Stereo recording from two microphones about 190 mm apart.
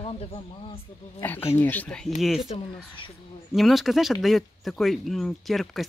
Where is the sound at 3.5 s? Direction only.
Centre (ahead or behind).